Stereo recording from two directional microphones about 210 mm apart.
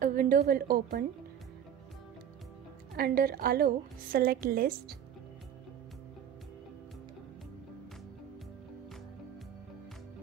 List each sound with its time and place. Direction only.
0.0 s a woman's voice: 40° right (ahead or behind)
3.0 s a woman's voice: 45° right (ahead or behind)